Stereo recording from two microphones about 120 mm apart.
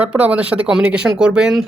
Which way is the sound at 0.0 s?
10° right (ahead or behind).